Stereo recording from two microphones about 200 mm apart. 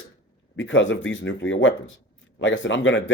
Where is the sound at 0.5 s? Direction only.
70° left (ahead or behind).